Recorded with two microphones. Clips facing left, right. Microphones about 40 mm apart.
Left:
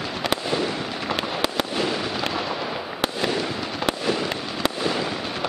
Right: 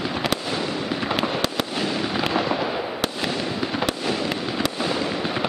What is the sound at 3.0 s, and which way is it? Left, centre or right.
Fireworks, centre.